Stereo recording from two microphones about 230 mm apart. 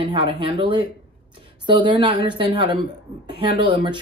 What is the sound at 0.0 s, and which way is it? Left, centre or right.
Speech, right.